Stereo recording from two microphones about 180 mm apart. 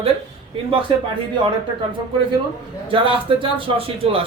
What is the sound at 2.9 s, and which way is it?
Speech, 30° right (ahead or behind).